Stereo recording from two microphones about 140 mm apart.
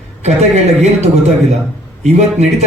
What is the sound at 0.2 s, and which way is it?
Speech, 55° right (ahead or behind).